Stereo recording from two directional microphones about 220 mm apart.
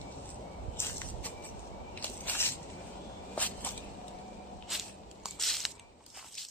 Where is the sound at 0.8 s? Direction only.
10° left (ahead or behind).